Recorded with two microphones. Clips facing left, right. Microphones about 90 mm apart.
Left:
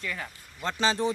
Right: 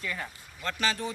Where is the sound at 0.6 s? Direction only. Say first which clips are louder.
Left 4 dB; 25° left (ahead or behind).